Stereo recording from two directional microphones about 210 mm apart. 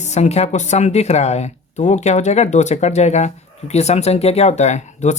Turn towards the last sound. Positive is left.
turn(degrees=35)  # may be behind; listen again after turning